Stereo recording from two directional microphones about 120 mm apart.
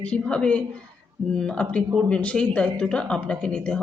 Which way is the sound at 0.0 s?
10° left (ahead or behind).